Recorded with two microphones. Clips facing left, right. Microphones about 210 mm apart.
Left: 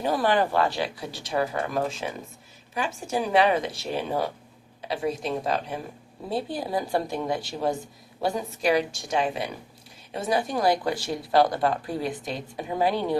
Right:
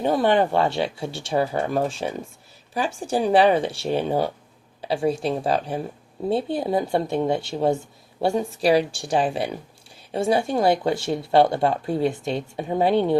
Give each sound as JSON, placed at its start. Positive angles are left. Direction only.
{"t": 0.0, "sound": "speech", "side_deg": -25}